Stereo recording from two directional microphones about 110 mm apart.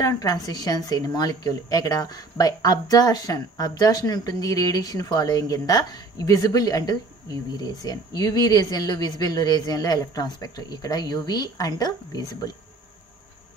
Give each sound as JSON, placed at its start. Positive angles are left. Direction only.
{"t": 0.0, "sound": "speech", "side_deg": 35}